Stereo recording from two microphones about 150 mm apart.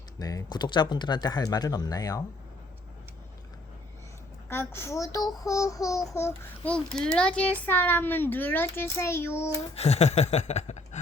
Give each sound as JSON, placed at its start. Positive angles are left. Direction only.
{"t": 0.2, "sound": "speech", "side_deg": 25}
{"t": 4.4, "sound": "speech", "side_deg": 15}
{"t": 6.7, "sound": "a child's voice", "side_deg": 5}
{"t": 9.7, "sound": "a sound", "side_deg": 45}